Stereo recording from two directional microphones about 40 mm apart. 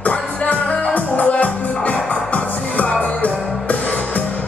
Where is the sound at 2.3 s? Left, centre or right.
Left.